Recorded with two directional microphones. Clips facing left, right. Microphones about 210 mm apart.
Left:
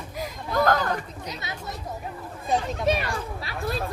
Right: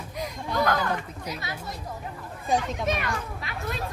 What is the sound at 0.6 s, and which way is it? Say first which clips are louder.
Speech: left 3 dB; 45° left (ahead or behind).